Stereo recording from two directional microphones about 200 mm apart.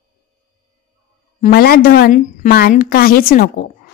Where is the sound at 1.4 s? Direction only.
50° left (ahead or behind).